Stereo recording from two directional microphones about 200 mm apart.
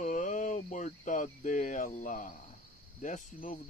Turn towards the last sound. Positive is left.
turn(degrees=40)  # may be behind; listen again after turning